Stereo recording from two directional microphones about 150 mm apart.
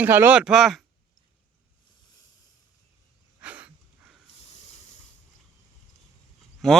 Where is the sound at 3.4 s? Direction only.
10° right (ahead or behind).